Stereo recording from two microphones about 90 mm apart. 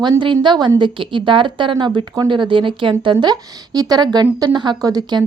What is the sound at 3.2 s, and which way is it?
A woman's voice, 50° right (ahead or behind).